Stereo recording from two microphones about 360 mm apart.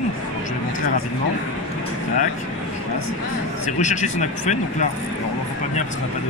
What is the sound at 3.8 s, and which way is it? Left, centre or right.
Speech, centre.